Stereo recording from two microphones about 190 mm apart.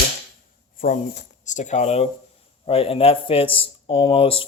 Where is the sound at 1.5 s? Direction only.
40° left (ahead or behind).